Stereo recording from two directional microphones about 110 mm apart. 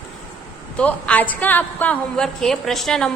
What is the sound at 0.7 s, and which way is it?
A woman's voice, 10° left (ahead or behind).